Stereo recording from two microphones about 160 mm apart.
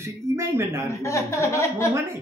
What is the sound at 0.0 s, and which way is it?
Speech, 15° right (ahead or behind).